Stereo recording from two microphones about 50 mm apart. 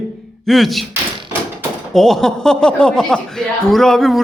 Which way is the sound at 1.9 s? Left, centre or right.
Centre.